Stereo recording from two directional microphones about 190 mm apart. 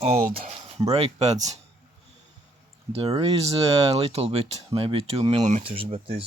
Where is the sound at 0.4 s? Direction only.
35° right (ahead or behind).